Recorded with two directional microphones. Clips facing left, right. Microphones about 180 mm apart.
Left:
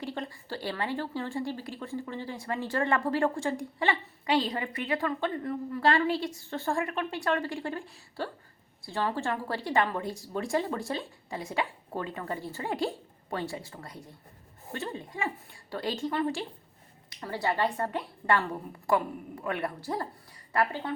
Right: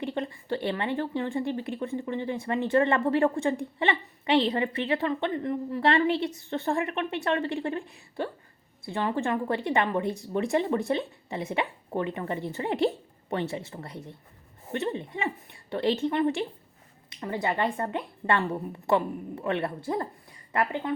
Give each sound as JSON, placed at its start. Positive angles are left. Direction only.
{"t": 0.0, "sound": "a woman's voice", "side_deg": -20}